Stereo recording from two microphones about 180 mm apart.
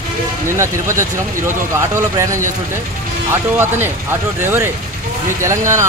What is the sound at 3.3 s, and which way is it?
Speech, 10° right (ahead or behind).